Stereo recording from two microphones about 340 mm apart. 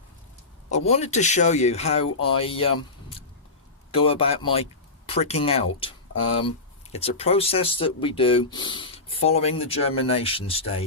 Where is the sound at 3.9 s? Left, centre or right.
Centre.